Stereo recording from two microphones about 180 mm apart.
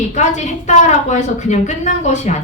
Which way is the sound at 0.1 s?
40° left (ahead or behind).